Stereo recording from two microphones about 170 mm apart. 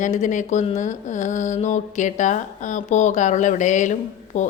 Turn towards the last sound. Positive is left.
turn(degrees=45)  # may be behind; listen again after turning